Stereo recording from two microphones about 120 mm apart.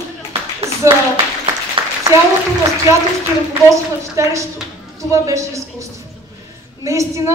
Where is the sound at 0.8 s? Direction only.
25° right (ahead or behind).